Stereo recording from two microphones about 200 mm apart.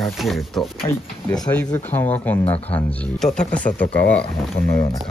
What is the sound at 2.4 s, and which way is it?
Speech, 30° left (ahead or behind).